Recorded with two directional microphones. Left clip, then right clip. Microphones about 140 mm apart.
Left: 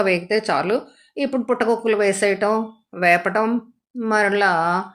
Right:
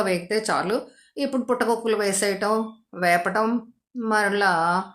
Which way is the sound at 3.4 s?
5° left (ahead or behind).